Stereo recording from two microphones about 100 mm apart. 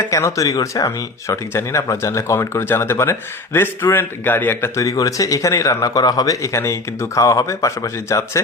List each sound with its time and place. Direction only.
0.1 s speech: 30° left (ahead or behind)
4.8 s a man's voice: 35° left (ahead or behind)